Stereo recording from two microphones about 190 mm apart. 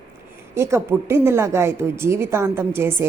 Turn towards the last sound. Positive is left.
turn(degrees=-10)  # may be behind; listen again after turning